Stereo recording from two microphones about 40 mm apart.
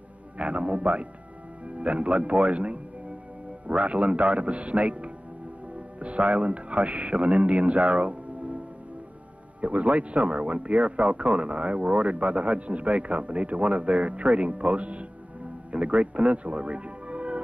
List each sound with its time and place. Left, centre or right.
0.4 s speech: right
9.6 s speech: right